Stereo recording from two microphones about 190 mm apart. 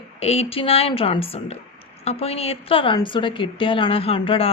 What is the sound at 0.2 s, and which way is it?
A woman's voice, 30° left (ahead or behind).